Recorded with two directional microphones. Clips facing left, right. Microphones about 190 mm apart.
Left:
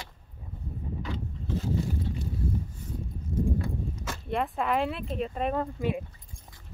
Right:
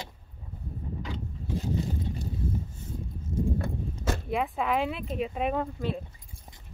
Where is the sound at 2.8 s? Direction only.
25° right (ahead or behind).